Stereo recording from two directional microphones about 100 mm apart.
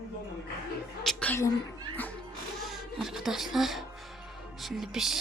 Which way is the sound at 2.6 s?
5° right (ahead or behind).